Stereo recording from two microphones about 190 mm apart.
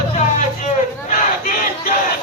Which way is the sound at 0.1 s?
40° left (ahead or behind).